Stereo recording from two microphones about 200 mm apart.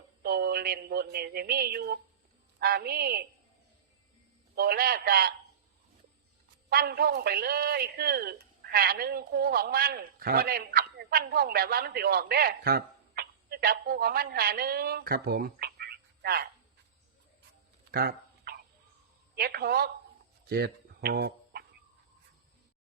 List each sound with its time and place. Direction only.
0.2 s a man's voice: 50° right (ahead or behind)
4.5 s a man's voice: 50° right (ahead or behind)
6.7 s a man's voice: 50° right (ahead or behind)
17.9 s dog: 50° right (ahead or behind)
19.4 s a man's voice: 50° right (ahead or behind)
20.5 s a sound: 50° right (ahead or behind)